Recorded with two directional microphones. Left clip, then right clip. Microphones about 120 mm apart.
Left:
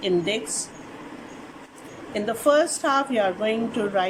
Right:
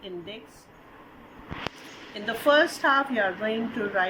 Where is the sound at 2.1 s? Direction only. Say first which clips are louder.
Left 2 dB; 15° left (ahead or behind).